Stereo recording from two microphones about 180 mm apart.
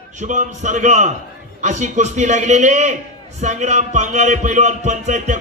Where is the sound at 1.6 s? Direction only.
40° right (ahead or behind).